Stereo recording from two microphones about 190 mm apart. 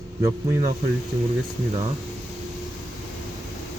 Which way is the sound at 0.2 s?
15° right (ahead or behind).